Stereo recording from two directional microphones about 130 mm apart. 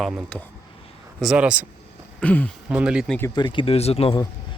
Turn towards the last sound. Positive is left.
turn(degrees=50)  # may be behind; listen again after turning